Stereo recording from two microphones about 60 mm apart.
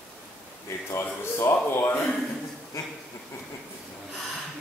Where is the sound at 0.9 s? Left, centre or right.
Left.